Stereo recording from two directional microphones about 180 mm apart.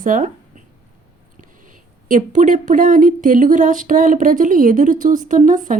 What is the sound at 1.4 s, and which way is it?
Speech, 45° right (ahead or behind).